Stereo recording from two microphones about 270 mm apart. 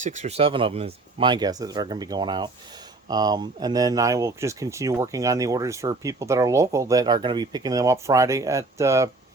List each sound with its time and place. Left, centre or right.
0.0 s speech: right; by 9.0 s centre